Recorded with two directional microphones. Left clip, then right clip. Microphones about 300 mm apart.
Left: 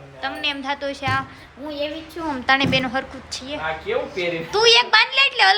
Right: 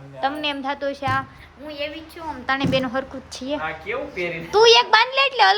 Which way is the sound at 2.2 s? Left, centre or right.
Centre.